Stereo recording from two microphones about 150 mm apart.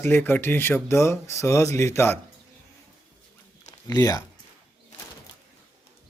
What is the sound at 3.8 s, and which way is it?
Speech, 25° left (ahead or behind).